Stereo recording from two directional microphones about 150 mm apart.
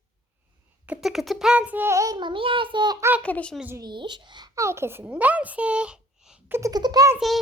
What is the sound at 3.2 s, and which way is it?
Speech, 10° left (ahead or behind).